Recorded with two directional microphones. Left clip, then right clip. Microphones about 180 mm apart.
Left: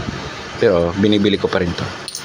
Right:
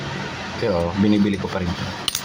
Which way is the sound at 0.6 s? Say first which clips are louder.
Left 7 dB; 25° left (ahead or behind).